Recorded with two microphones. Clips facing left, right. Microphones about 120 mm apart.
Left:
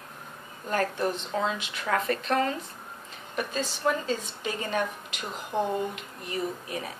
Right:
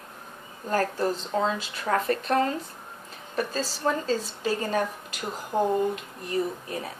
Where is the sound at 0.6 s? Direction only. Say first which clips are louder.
Right 2 dB; 35° right (ahead or behind).